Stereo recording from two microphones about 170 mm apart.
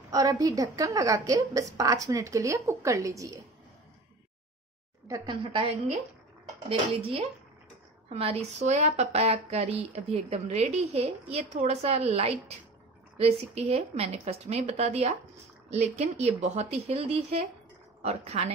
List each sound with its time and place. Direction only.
0.1 s a woman's voice: 20° right (ahead or behind)
5.0 s a woman's voice: 25° right (ahead or behind)
6.7 s a woman's voice: 35° right (ahead or behind)